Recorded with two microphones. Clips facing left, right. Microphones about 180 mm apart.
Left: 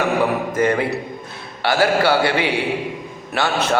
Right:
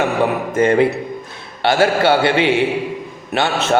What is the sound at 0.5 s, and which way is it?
A man's voice, 25° right (ahead or behind).